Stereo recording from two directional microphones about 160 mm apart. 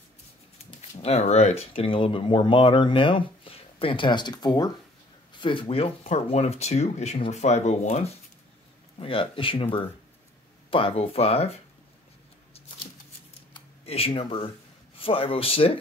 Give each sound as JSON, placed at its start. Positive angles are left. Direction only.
{"t": 0.7, "sound": "speech", "side_deg": 40}
{"t": 13.5, "sound": "a sound", "side_deg": 35}
{"t": 15.0, "sound": "speech", "side_deg": 35}